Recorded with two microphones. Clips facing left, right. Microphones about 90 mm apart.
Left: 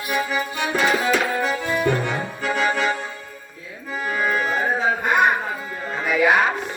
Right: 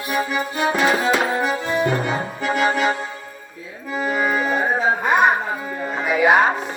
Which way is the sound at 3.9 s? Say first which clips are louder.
Right 2 dB; 20° right (ahead or behind).